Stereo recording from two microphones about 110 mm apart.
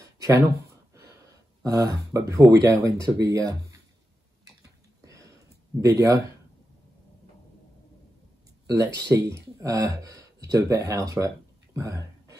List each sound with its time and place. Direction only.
1.6 s speech: 30° right (ahead or behind)
5.0 s a sound: 30° right (ahead or behind)
5.8 s speech: 30° right (ahead or behind)
8.6 s speech: 30° right (ahead or behind)